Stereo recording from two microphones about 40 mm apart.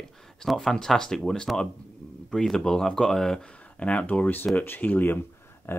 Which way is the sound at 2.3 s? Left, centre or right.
Centre.